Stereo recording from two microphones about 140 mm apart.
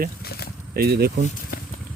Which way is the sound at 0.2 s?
90° left.